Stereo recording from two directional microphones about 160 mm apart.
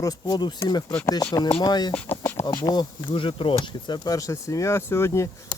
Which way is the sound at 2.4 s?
25° left (ahead or behind).